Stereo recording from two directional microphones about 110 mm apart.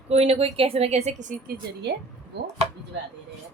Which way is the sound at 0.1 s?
65° right (ahead or behind).